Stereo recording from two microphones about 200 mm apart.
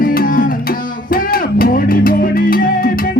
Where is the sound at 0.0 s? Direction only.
45° left (ahead or behind).